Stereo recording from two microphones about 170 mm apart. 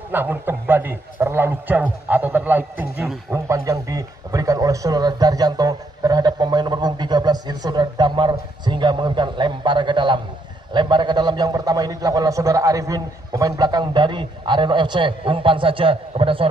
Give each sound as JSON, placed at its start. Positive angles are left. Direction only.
{"t": 0.1, "sound": "a man's voice", "side_deg": -10}